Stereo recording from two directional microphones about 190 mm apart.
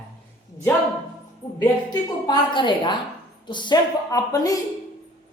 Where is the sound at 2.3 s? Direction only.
25° left (ahead or behind).